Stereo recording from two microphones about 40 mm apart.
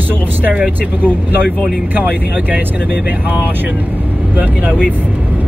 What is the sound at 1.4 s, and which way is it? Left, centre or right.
Speech, centre.